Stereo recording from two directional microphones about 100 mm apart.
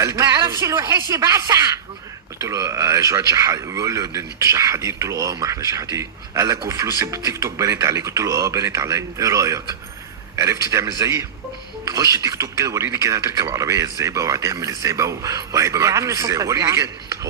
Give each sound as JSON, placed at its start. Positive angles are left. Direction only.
{"t": 0.0, "sound": "a man's voice", "side_deg": -30}